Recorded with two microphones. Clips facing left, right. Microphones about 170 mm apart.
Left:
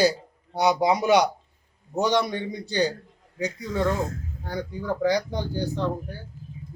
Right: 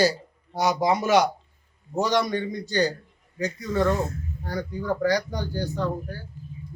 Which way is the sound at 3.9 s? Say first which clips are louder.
Right 1 dB; 90° left.